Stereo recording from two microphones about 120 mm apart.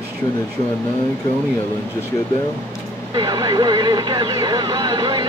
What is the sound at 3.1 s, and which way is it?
Speech, 35° right (ahead or behind).